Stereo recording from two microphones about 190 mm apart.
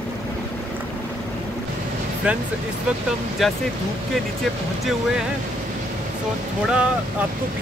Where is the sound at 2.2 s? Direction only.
5° right (ahead or behind).